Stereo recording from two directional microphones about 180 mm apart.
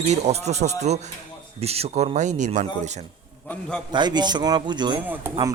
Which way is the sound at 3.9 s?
25° right (ahead or behind).